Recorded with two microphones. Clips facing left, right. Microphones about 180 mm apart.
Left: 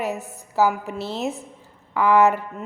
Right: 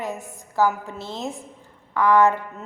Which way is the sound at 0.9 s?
15° right (ahead or behind).